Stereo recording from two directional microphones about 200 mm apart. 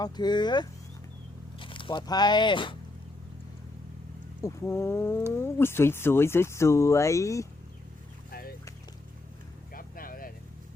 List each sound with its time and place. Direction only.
0.0 s speech: 20° left (ahead or behind)
4.4 s speech: 15° left (ahead or behind)
8.3 s a sound: 50° left (ahead or behind)
9.7 s vehicle: 45° left (ahead or behind)